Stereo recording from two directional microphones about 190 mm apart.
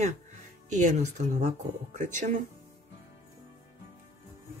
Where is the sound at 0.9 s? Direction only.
40° right (ahead or behind).